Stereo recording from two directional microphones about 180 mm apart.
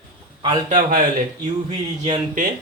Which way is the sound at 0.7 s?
45° right (ahead or behind).